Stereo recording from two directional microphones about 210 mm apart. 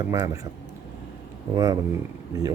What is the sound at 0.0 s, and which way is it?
Speech, 20° right (ahead or behind).